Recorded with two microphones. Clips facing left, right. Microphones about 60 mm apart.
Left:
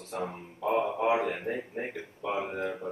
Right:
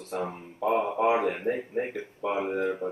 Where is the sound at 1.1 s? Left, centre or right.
Right.